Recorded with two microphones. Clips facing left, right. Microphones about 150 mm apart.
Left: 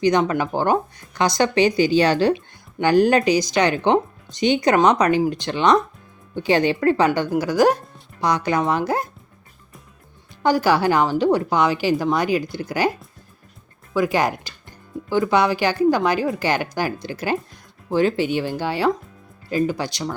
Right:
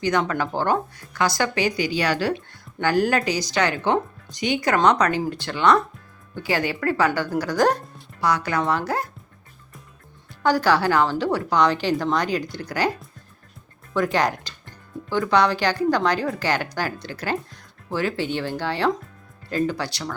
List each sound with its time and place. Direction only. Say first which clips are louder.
0.0 s speech: left 4 dB; 20° left (ahead or behind)
7.4 s speech: left 3 dB; 10° left (ahead or behind)
8.2 s speech: left 2 dB; 20° left (ahead or behind)
10.4 s speech: left 2 dB; 15° left (ahead or behind)
13.9 s speech: left 2 dB; 5° left (ahead or behind)